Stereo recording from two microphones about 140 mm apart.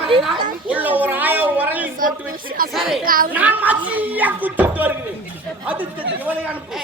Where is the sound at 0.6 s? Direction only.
10° right (ahead or behind).